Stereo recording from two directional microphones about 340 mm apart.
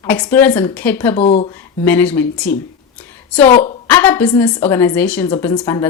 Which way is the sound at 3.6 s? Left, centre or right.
Centre.